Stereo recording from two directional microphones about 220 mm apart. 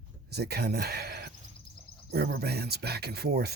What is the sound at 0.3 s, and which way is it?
Speech, 45° right (ahead or behind).